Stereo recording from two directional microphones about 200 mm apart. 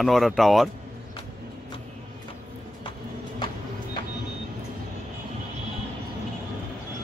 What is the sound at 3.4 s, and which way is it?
Music, 25° left (ahead or behind).